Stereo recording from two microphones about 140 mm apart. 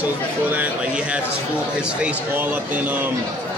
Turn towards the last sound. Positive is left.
turn(degrees=-10)  # may be behind; listen again after turning